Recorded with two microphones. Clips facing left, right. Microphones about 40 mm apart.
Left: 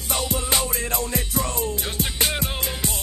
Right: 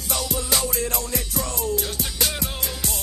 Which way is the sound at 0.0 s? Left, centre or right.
Left.